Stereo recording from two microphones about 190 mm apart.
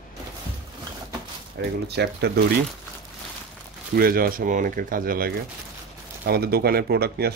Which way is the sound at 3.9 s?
50° right (ahead or behind).